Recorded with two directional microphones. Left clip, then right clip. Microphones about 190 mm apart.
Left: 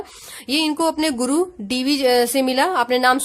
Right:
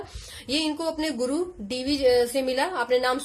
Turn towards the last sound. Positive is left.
turn(degrees=45)  # may be behind; listen again after turning